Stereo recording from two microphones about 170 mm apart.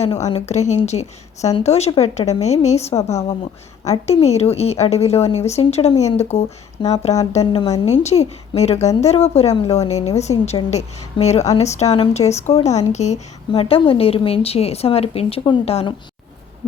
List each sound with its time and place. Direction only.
0.0 s a woman's voice: 40° left (ahead or behind)